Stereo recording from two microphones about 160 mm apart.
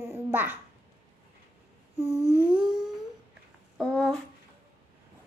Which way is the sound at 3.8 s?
5° left (ahead or behind).